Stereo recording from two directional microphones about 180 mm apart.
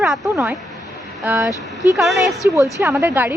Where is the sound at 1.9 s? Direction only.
Centre (ahead or behind).